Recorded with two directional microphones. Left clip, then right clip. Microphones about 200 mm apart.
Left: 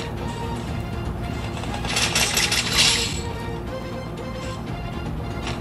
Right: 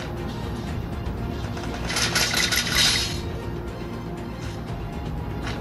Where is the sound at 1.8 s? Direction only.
10° right (ahead or behind).